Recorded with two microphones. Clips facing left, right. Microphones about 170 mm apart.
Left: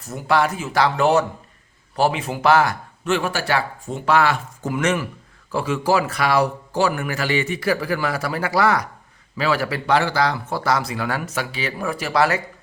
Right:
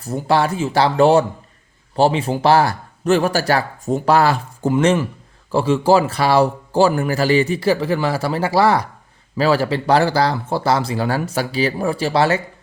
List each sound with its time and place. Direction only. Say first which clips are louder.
0.0 s speech: right 2 dB; 30° right (ahead or behind)